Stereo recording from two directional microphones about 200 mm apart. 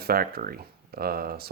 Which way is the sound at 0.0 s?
50° right (ahead or behind).